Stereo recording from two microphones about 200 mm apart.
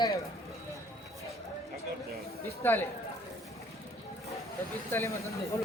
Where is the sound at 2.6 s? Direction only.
10° left (ahead or behind).